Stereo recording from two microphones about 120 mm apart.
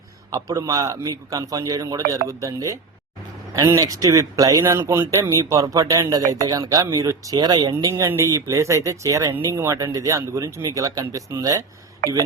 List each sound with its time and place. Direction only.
0.3 s speech: 30° right (ahead or behind)